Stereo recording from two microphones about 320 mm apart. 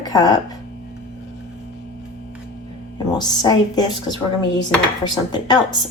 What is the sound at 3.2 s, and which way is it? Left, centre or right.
Speech, centre.